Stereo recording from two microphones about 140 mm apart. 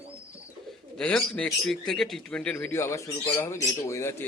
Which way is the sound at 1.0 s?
5° left (ahead or behind).